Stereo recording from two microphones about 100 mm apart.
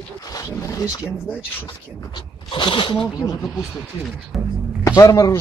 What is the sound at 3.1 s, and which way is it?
Speech, 35° left (ahead or behind).